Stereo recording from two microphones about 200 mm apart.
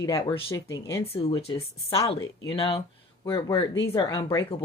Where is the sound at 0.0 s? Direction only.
20° left (ahead or behind).